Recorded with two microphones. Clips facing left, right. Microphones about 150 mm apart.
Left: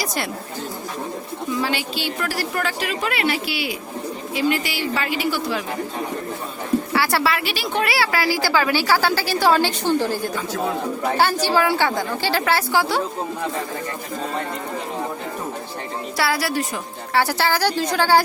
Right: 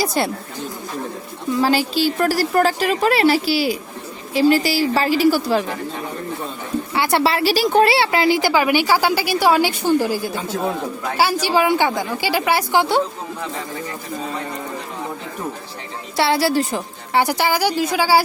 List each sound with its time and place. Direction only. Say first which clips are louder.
0.0 s a woman's voice: right 6 dB; 30° right (ahead or behind)
1.6 s a woman's voice: right 7 dB; 40° right (ahead or behind)
6.9 s a woman's voice: right 6 dB; 20° right (ahead or behind)
16.1 s a woman's voice: right 5 dB; 25° right (ahead or behind)
17.2 s a woman's voice: right 2 dB; 15° right (ahead or behind)